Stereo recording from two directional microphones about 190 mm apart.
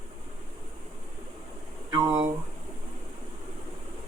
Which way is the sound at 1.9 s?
25° right (ahead or behind).